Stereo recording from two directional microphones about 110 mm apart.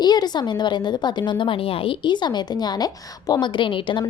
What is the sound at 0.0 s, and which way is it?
A woman's voice, 40° left (ahead or behind).